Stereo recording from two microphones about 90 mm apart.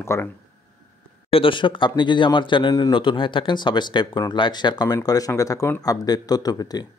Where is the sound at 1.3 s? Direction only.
80° left.